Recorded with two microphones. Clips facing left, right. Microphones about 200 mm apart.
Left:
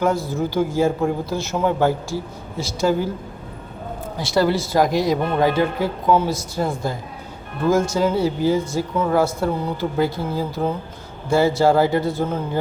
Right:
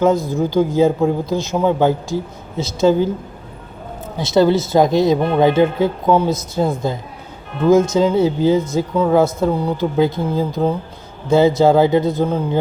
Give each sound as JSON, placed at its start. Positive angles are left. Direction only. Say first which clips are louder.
{"t": 0.0, "sound": "a man's voice", "louder": "right 5 dB", "side_deg": -20}
{"t": 4.2, "sound": "speech", "louder": "right 5 dB", "side_deg": -20}